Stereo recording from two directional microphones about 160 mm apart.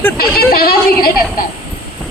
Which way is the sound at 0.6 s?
70° left (ahead or behind).